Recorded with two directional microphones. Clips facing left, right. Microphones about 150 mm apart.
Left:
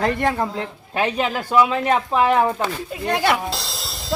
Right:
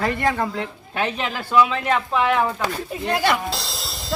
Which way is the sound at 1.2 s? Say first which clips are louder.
Even; 40° left (ahead or behind).